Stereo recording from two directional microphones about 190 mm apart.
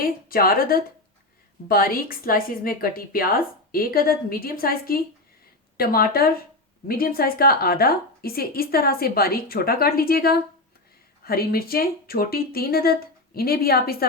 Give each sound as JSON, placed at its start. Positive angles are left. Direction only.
{"t": 0.0, "sound": "a woman's voice", "side_deg": 50}